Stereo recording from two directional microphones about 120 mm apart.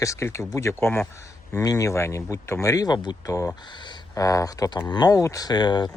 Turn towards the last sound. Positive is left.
turn(degrees=35)  # may be behind; listen again after turning